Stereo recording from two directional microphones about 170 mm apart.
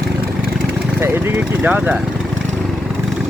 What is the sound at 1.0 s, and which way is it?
Speech, 15° right (ahead or behind).